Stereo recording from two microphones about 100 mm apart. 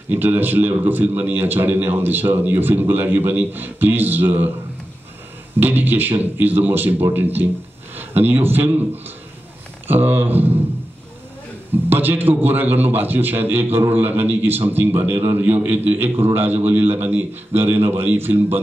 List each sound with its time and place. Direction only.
0.1 s a man's voice: 20° right (ahead or behind)
5.6 s a man's voice: 20° right (ahead or behind)
11.9 s a man's voice: 20° right (ahead or behind)